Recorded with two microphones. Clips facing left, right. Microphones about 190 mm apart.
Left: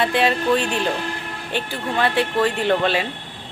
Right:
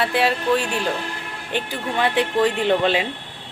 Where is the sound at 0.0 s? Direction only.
5° right (ahead or behind).